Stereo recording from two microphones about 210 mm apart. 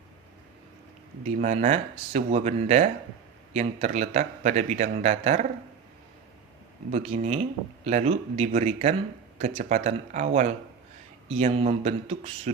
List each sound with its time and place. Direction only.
1.2 s a man's voice: 35° right (ahead or behind)
6.9 s a man's voice: 30° right (ahead or behind)